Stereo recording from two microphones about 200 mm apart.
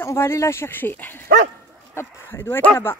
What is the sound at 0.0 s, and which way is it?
Speech, 15° left (ahead or behind).